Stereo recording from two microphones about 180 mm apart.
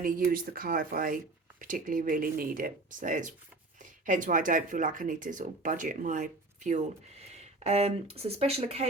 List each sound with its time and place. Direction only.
0.0 s speech: 50° right (ahead or behind); by 8.9 s 35° right (ahead or behind)